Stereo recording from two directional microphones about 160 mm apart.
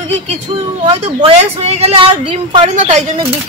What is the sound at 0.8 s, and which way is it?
A woman's voice, 40° right (ahead or behind).